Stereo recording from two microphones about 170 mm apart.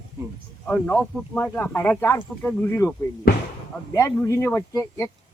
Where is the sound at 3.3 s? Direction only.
60° left (ahead or behind).